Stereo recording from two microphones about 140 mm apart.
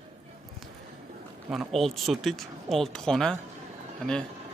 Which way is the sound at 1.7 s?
Centre (ahead or behind).